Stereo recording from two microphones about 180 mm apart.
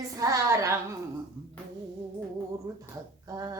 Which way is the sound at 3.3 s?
20° right (ahead or behind).